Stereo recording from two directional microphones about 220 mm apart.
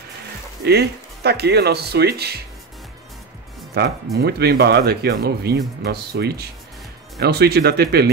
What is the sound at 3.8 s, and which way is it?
Speech, 45° right (ahead or behind).